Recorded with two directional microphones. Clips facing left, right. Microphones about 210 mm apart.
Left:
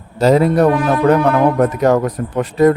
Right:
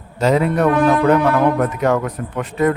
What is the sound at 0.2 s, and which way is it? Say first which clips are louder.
Speech: left 4 dB; 35° left (ahead or behind).